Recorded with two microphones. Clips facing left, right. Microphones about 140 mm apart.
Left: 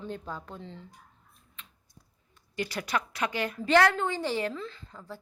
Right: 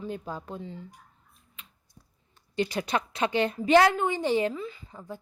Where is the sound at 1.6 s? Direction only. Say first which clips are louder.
Even; 10° right (ahead or behind).